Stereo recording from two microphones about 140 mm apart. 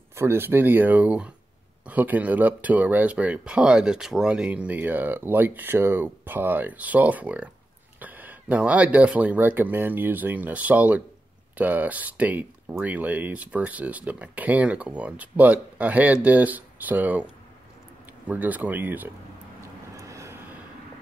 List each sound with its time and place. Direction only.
0.1 s speech: 15° right (ahead or behind)
18.3 s speech: 10° right (ahead or behind)
20.0 s vehicle: 20° right (ahead or behind)